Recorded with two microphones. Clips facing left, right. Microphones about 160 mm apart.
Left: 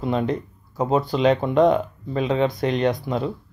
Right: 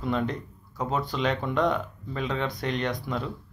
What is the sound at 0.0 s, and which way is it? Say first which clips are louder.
Speech: left 5 dB; 20° left (ahead or behind).